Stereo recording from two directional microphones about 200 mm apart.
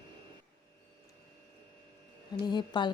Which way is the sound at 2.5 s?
20° left (ahead or behind).